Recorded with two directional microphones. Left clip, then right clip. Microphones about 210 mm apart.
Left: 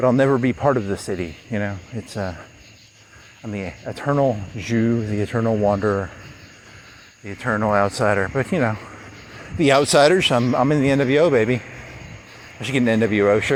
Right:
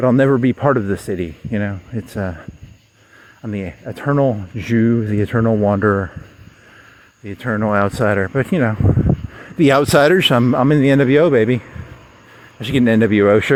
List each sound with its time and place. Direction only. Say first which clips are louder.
0.0 s speech: right 3 dB; 55° right (ahead or behind)
3.4 s speech: right 2 dB; 60° right (ahead or behind)
7.3 s speech: right 1 dB; 55° right (ahead or behind)